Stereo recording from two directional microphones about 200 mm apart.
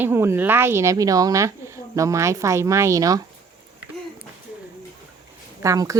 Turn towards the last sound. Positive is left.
turn(degrees=-15)  # may be behind; listen again after turning